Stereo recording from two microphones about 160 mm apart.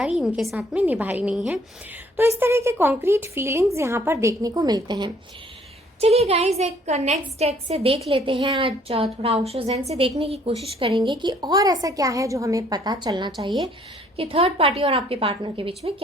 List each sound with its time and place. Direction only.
0.0 s a woman's voice: 5° right (ahead or behind)
2.1 s a woman's voice: 15° right (ahead or behind)
6.0 s a woman's voice: 40° right (ahead or behind)
14.2 s a woman's voice: 40° right (ahead or behind)